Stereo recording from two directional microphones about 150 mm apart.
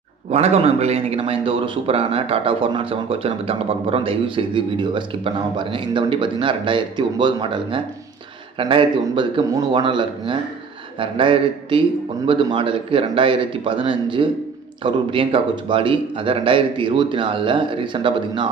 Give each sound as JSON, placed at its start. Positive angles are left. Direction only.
{"t": 0.3, "sound": "a man's voice", "side_deg": -45}